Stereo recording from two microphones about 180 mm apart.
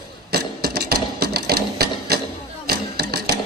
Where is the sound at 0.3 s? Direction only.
60° right (ahead or behind).